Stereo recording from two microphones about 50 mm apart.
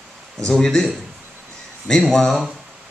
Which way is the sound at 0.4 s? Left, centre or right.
Centre.